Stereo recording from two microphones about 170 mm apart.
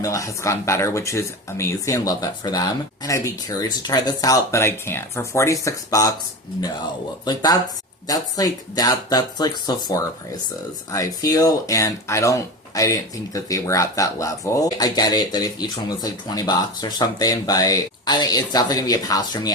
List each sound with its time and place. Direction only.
0.0 s speech: 20° left (ahead or behind)
7.3 s speech: 25° left (ahead or behind)